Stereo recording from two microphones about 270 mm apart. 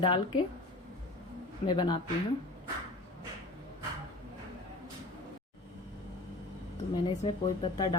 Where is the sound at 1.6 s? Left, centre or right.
Centre.